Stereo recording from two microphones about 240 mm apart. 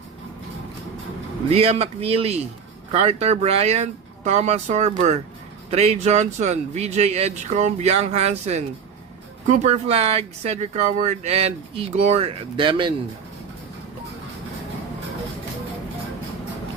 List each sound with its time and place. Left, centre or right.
1.5 s speech: right